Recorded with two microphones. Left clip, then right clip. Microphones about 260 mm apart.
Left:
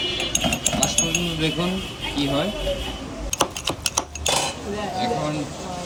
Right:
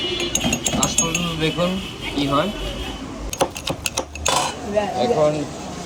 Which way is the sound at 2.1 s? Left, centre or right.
Centre.